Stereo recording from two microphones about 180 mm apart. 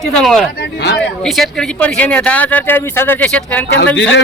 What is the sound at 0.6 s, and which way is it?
Speech, 70° left (ahead or behind).